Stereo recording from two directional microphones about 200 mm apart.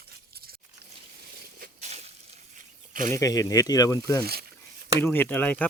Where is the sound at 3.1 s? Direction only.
15° left (ahead or behind).